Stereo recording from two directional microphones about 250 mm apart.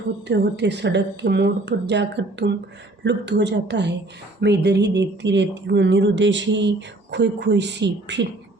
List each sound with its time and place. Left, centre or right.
0.3 s speech: right